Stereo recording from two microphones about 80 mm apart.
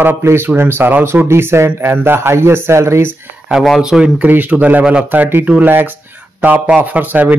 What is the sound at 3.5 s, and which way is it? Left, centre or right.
Speech, centre.